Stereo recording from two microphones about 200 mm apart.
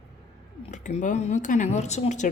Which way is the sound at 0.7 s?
35° left (ahead or behind).